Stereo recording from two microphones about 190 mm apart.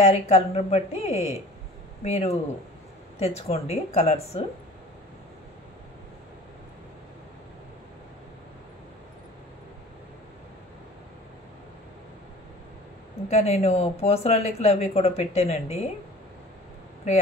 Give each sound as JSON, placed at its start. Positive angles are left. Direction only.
{"t": 0.0, "sound": "speech", "side_deg": 35}
{"t": 13.3, "sound": "speech", "side_deg": 35}